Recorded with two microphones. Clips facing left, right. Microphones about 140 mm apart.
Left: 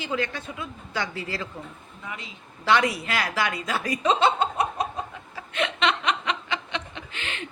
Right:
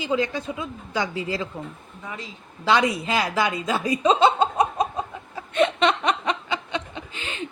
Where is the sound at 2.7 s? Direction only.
20° right (ahead or behind).